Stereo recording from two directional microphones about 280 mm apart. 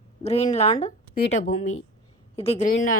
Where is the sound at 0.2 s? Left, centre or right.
Left.